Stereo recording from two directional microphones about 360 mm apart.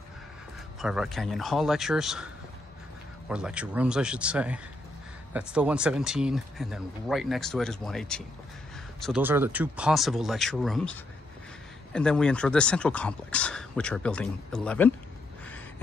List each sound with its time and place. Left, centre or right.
0.7 s speech: centre
3.3 s speech: centre
11.9 s speech: centre